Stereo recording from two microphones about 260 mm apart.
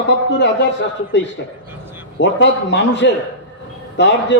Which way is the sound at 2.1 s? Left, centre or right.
Left.